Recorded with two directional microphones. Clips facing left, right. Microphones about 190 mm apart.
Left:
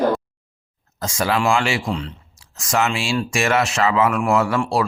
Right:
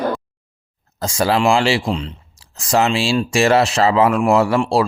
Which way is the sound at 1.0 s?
30° right (ahead or behind).